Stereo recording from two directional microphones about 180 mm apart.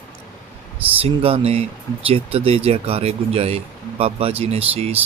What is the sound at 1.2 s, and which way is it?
Speech, 35° right (ahead or behind).